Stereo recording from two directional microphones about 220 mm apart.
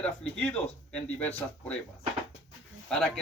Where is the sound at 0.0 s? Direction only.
5° left (ahead or behind).